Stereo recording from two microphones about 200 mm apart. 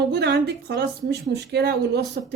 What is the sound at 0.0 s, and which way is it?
Speech, 55° right (ahead or behind).